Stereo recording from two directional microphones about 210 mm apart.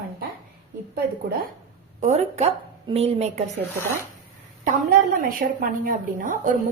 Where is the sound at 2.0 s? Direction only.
30° right (ahead or behind).